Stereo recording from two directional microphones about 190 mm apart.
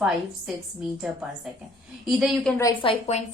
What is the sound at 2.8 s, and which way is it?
Speech, 30° left (ahead or behind).